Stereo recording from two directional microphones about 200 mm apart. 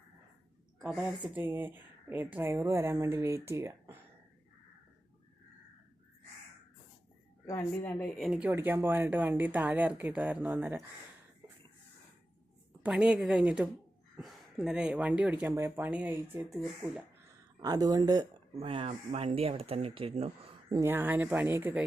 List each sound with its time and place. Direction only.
0.8 s speech: 5° right (ahead or behind)
7.4 s a woman's voice: 15° left (ahead or behind)
8.2 s speech: 5° right (ahead or behind)
12.8 s a woman's voice: 5° right (ahead or behind)
16.4 s a woman's voice: centre (ahead or behind)
17.6 s speech: 20° right (ahead or behind)
20.7 s speech: 15° right (ahead or behind)